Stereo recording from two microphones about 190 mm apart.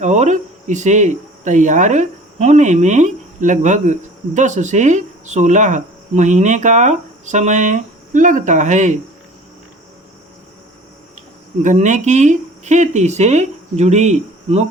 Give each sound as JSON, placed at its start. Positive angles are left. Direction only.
{"t": 0.0, "sound": "speech", "side_deg": -40}
{"t": 11.6, "sound": "speech", "side_deg": -40}